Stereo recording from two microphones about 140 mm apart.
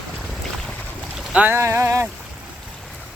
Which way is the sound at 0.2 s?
Centre (ahead or behind).